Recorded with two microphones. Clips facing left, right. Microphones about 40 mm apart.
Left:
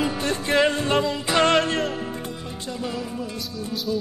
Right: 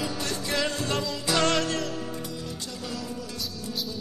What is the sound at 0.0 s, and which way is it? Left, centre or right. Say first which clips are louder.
Music: left 6 dB; left.